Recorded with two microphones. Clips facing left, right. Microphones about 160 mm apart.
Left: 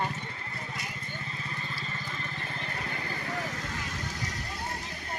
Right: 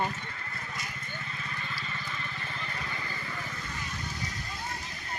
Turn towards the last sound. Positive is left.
turn(degrees=90)